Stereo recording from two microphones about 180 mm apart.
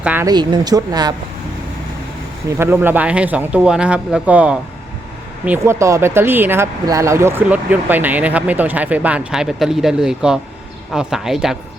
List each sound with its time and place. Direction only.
0.0 s speech: 10° right (ahead or behind)
0.3 s speech: 25° right (ahead or behind)
2.5 s speech: 15° right (ahead or behind)